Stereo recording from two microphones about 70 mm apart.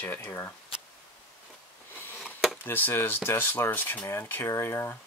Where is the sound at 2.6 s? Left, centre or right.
Left.